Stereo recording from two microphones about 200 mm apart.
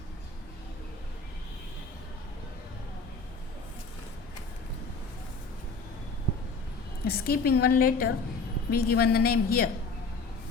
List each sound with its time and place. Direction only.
7.0 s a woman's voice: 50° left (ahead or behind)